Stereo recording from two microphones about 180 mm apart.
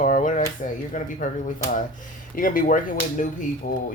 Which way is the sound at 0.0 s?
45° left (ahead or behind).